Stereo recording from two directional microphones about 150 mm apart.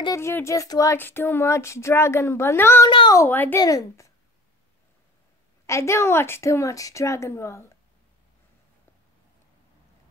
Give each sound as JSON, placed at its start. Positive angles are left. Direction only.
{"t": 0.0, "sound": "speech", "side_deg": 20}
{"t": 2.9, "sound": "speech", "side_deg": 30}
{"t": 3.2, "sound": "a woman's voice", "side_deg": 10}
{"t": 5.7, "sound": "a woman's voice", "side_deg": 20}